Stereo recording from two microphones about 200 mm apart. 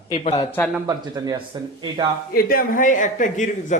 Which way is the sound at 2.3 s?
45° left (ahead or behind).